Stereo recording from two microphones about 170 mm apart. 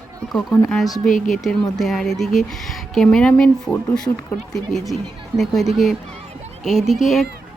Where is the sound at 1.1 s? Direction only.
50° left (ahead or behind).